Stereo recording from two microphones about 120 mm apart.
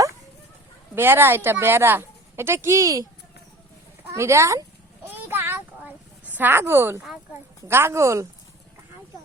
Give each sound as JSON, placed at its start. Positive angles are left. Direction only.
{"t": 0.9, "sound": "speech", "side_deg": -20}
{"t": 4.1, "sound": "speech", "side_deg": -25}
{"t": 5.0, "sound": "a sound", "side_deg": -15}
{"t": 7.7, "sound": "speech", "side_deg": -20}